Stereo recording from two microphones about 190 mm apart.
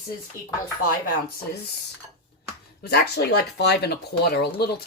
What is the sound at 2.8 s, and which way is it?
Speech, 55° left (ahead or behind).